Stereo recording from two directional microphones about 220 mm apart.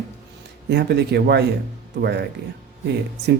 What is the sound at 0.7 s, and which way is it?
Speech, 50° right (ahead or behind).